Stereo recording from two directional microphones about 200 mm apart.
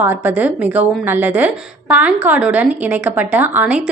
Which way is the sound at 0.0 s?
10° right (ahead or behind).